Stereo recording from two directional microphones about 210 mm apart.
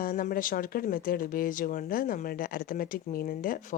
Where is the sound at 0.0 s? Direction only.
40° left (ahead or behind).